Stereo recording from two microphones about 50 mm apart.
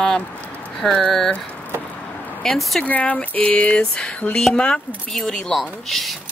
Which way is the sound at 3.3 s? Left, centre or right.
Left.